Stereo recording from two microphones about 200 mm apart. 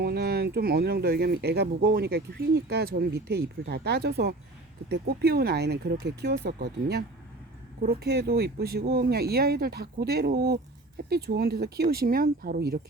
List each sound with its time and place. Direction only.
0.0 s speech: 50° right (ahead or behind)